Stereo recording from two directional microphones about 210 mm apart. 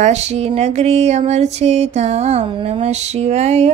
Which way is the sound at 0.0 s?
30° right (ahead or behind).